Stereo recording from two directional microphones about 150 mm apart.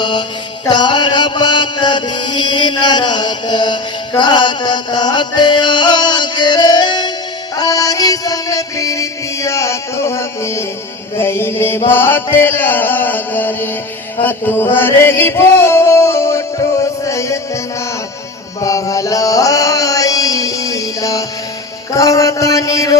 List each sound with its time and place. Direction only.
0.0 s mantra: 30° left (ahead or behind)
4.2 s music: 30° left (ahead or behind)
11.2 s chant: 15° left (ahead or behind)
14.2 s music: 15° left (ahead or behind)
18.6 s chant: 20° left (ahead or behind)
21.9 s a sound: 20° left (ahead or behind)